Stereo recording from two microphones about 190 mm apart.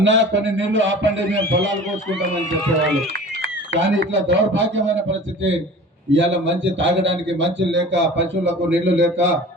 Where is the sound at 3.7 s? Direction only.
70° right (ahead or behind).